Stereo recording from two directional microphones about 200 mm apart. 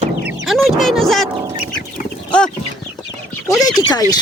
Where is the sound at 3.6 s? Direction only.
20° left (ahead or behind).